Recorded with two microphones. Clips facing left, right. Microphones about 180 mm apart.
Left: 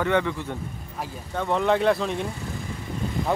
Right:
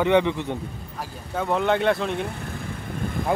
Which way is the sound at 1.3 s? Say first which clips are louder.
Even; centre (ahead or behind).